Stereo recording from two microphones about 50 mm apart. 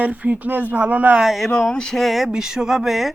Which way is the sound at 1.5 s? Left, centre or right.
Centre.